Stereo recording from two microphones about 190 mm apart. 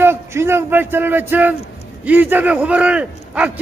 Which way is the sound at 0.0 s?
15° right (ahead or behind).